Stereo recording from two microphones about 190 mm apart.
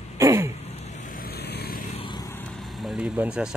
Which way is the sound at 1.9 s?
25° left (ahead or behind).